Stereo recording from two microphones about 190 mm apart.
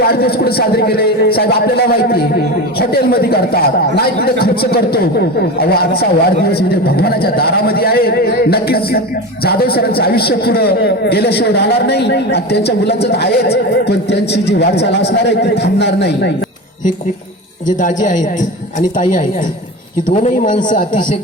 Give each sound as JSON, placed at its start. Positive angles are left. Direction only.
{"t": 0.1, "sound": "a man's voice", "side_deg": 55}
{"t": 17.7, "sound": "a man's voice", "side_deg": 45}
{"t": 20.1, "sound": "a man's voice", "side_deg": 45}